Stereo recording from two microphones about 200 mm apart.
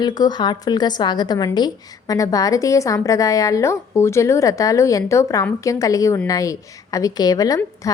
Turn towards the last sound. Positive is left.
turn(degrees=15)  # may be behind; listen again after turning